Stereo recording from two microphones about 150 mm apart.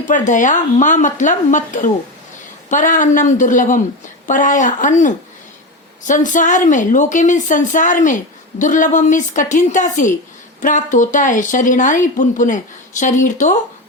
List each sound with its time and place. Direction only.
0.1 s a woman's voice: 55° left (ahead or behind)